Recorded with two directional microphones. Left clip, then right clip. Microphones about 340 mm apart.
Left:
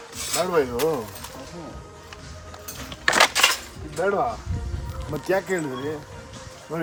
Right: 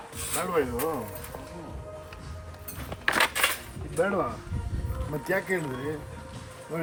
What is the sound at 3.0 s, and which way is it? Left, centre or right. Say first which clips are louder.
Dishes: left 6 dB; centre.